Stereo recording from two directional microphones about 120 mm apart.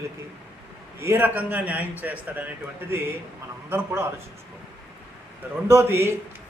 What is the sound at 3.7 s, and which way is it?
Speech, 20° right (ahead or behind).